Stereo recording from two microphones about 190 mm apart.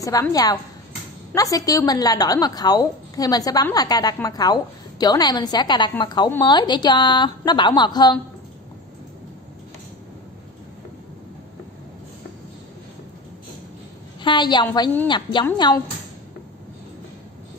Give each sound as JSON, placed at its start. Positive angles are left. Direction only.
{"t": 0.0, "sound": "a woman's voice", "side_deg": 20}
{"t": 14.2, "sound": "a woman's voice", "side_deg": 25}